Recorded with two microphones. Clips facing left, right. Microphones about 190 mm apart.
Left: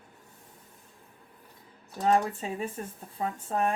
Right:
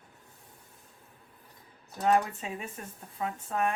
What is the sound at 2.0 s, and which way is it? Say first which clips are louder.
Speech: left 1 dB; 35° left (ahead or behind).